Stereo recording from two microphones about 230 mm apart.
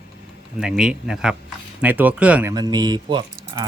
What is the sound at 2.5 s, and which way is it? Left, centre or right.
Speech, centre.